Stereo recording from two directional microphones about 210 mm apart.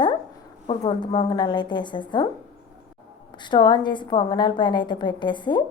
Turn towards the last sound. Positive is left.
turn(degrees=20)  # may be behind; listen again after turning